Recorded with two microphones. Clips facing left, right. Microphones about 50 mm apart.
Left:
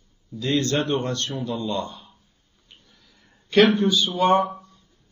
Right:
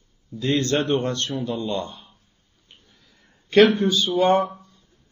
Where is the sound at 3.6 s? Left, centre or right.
Left.